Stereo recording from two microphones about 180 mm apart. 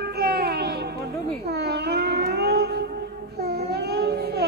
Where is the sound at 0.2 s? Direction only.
60° right (ahead or behind).